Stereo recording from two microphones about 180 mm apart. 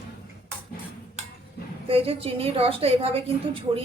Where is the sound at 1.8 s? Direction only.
30° right (ahead or behind).